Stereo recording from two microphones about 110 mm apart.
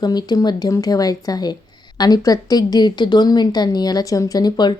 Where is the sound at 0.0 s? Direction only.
40° left (ahead or behind).